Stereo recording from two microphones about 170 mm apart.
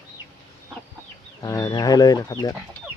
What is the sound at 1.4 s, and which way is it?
Speech, 20° left (ahead or behind).